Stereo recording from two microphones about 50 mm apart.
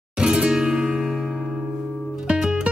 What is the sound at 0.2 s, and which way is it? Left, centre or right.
Music, centre.